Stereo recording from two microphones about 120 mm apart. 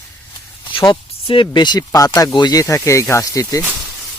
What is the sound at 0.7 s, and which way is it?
Speech, 45° left (ahead or behind).